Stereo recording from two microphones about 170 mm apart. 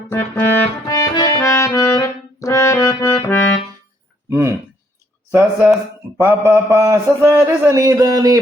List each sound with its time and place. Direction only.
0.1 s music: 15° left (ahead or behind)
4.3 s a man's voice: 15° right (ahead or behind)